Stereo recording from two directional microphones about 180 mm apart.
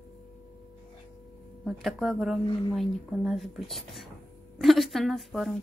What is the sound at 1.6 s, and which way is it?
A woman's voice, centre (ahead or behind).